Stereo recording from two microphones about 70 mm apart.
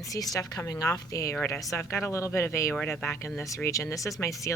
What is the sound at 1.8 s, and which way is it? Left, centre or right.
Speech, left.